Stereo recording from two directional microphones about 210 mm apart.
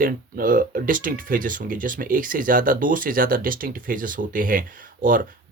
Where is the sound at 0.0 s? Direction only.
40° right (ahead or behind).